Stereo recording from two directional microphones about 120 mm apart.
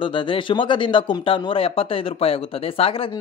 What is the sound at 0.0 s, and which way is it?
Speech, 45° left (ahead or behind).